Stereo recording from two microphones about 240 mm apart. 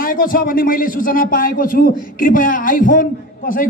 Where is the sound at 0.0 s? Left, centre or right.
Left.